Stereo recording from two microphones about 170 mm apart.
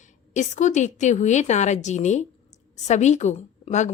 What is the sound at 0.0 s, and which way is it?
A woman's voice, 45° left (ahead or behind).